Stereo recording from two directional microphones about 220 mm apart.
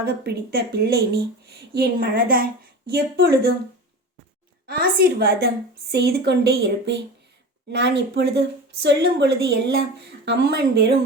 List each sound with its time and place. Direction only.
0.0 s speech: 45° right (ahead or behind)
4.6 s speech: 45° right (ahead or behind)